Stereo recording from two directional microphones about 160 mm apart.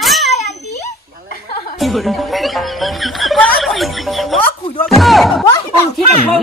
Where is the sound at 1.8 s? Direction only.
Centre (ahead or behind).